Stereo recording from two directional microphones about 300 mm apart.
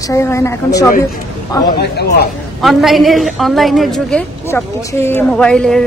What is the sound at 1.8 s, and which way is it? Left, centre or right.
Speech, left.